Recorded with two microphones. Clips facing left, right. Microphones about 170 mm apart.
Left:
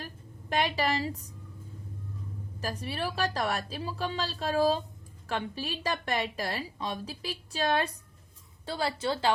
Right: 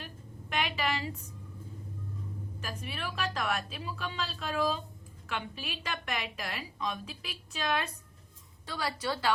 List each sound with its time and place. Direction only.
0.5 s a woman's voice: 35° left (ahead or behind)
2.6 s a woman's voice: 35° left (ahead or behind)